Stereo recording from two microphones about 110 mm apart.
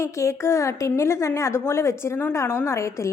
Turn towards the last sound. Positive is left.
turn(degrees=25)  # may be behind; listen again after turning